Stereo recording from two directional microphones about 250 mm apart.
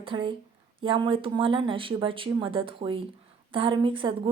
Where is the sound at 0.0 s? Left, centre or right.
Right.